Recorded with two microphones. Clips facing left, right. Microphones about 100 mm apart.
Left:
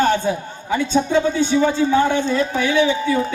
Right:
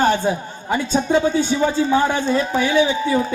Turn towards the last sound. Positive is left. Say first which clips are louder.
# even
turn(degrees=-45)  # may be behind; listen again after turning